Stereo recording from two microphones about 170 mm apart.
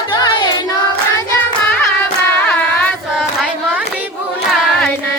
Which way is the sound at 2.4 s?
10° left (ahead or behind).